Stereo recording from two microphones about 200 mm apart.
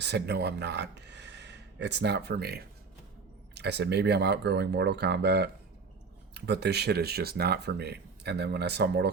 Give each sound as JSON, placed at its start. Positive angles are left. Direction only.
{"t": 0.0, "sound": "speech", "side_deg": -55}